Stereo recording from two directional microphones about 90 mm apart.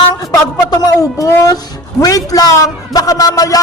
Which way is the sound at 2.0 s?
40° left (ahead or behind).